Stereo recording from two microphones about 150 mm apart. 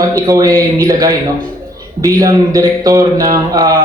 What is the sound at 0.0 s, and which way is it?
Speech, 20° right (ahead or behind).